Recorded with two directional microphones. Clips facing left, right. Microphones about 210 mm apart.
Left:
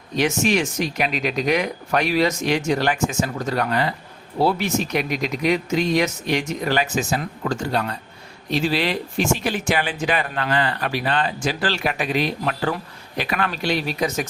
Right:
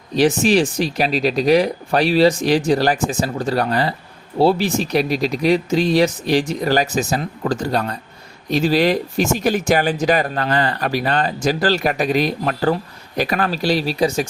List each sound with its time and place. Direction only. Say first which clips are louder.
0.2 s speech: right 5 dB; 35° right (ahead or behind)